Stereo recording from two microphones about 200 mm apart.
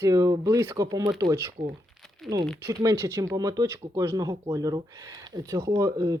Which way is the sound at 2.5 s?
15° right (ahead or behind).